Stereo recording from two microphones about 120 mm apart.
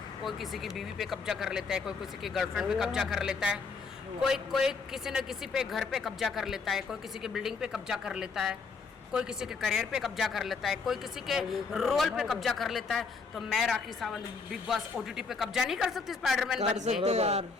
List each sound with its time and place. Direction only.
0.3 s speech: centre (ahead or behind)
16.6 s a man's voice: 80° right